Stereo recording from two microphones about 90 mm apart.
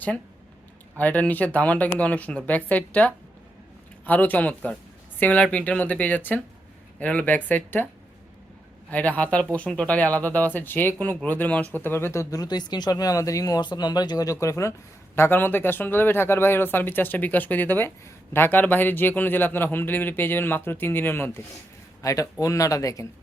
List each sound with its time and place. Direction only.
0.9 s speech: 15° left (ahead or behind)
8.9 s speech: 15° left (ahead or behind); by 12.4 s 30° left (ahead or behind)
12.4 s speech: 50° left (ahead or behind); by 21.4 s 25° left (ahead or behind)
22.0 s speech: 40° left (ahead or behind)